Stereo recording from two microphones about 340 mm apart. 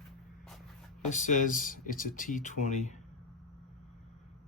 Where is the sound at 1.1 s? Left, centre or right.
Left.